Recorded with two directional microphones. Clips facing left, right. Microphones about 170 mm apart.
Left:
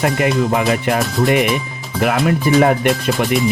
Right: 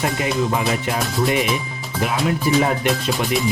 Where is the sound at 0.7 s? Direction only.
65° left (ahead or behind).